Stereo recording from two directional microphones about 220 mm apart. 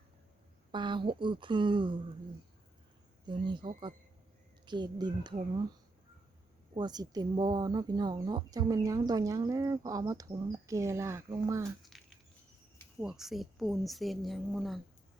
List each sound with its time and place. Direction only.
0.7 s speech: 20° right (ahead or behind)
3.2 s speech: 20° right (ahead or behind)
6.7 s speech: 20° right (ahead or behind)
11.8 s a sound: centre (ahead or behind)
13.0 s a woman's voice: centre (ahead or behind)